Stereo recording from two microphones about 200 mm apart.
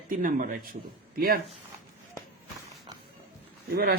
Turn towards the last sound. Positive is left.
turn(degrees=-50)  # may be behind; listen again after turning